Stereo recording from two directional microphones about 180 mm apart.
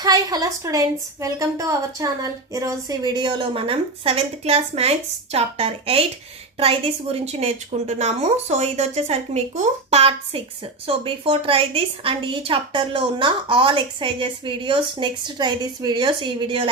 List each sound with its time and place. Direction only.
0.0 s a woman's voice: 20° right (ahead or behind)